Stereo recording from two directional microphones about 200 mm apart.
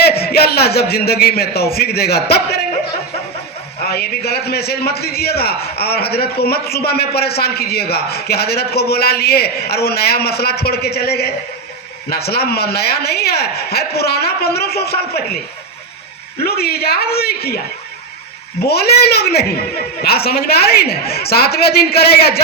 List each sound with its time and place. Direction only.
0.0 s a man's voice: 50° left (ahead or behind)
3.8 s a man's voice: 50° left (ahead or behind)
16.4 s a man's voice: 50° left (ahead or behind)
18.6 s a man's voice: 50° left (ahead or behind)